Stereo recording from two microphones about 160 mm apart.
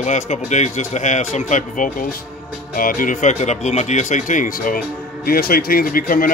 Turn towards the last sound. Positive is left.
turn(degrees=65)  # may be behind; listen again after turning